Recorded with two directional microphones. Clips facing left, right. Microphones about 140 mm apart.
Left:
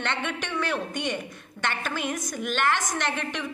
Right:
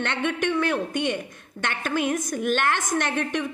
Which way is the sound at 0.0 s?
50° right (ahead or behind).